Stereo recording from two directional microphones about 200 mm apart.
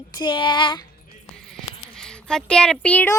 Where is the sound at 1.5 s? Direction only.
5° left (ahead or behind).